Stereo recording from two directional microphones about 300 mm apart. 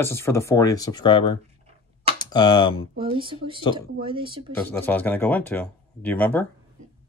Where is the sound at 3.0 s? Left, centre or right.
Centre.